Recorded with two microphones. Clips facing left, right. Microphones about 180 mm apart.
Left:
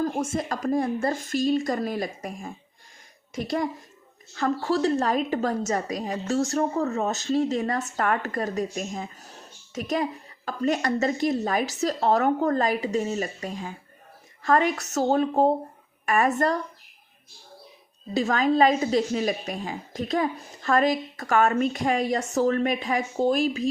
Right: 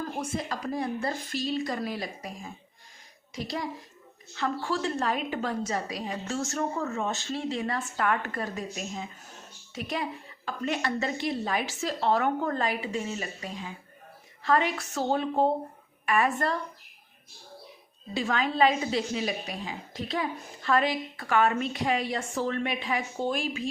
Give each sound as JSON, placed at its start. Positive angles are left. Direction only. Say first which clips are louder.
{"t": 0.0, "sound": "a woman's voice", "louder": "left 6 dB", "side_deg": 45}
{"t": 18.1, "sound": "a woman's voice", "louder": "left 6 dB", "side_deg": 40}